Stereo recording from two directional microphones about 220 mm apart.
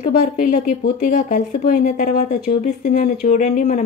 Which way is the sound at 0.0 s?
40° left (ahead or behind).